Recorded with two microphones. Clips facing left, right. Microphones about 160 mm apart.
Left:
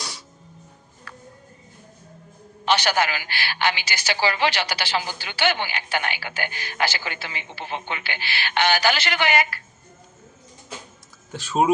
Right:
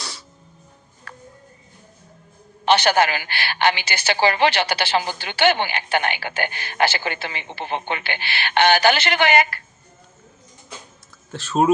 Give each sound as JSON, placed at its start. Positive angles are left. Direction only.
{"t": 2.6, "sound": "speech", "side_deg": -60}
{"t": 11.3, "sound": "speech", "side_deg": 10}